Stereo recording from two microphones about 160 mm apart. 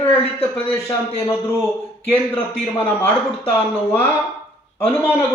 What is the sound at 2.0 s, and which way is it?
Speech, 40° left (ahead or behind).